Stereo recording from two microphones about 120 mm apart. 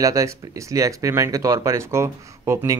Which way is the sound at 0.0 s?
25° right (ahead or behind).